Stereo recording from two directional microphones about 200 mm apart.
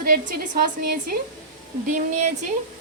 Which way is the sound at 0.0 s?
45° right (ahead or behind).